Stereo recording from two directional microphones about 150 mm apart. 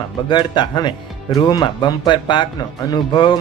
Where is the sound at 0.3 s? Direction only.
30° left (ahead or behind).